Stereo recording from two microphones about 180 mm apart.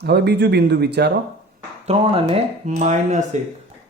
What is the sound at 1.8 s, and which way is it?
Speech, 35° right (ahead or behind).